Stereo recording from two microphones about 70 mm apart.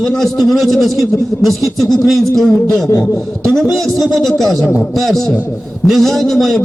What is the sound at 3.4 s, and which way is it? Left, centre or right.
A man's voice, centre.